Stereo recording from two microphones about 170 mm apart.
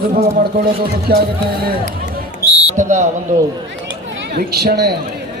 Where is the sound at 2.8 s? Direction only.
45° right (ahead or behind).